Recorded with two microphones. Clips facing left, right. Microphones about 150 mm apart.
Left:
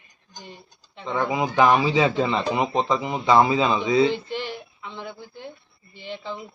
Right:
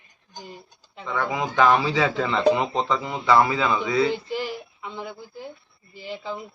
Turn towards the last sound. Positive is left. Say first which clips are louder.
# right 1 dB
turn(degrees=-5)  # may be behind; listen again after turning